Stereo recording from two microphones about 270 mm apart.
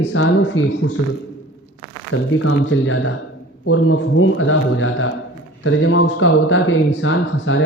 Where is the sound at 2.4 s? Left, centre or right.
Left.